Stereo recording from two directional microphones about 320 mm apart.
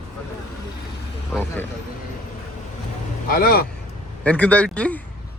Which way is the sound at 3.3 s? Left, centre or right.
Left.